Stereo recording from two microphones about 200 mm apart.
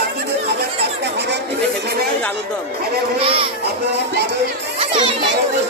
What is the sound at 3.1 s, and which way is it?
Speech, 30° right (ahead or behind).